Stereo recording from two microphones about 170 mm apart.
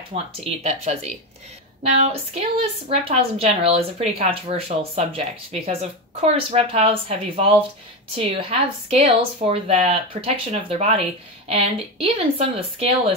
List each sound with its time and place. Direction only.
0.1 s a woman's voice: 35° right (ahead or behind)